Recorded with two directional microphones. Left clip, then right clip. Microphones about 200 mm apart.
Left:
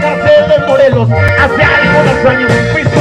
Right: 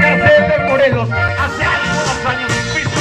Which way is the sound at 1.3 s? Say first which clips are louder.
Left 8 dB; 50° left (ahead or behind).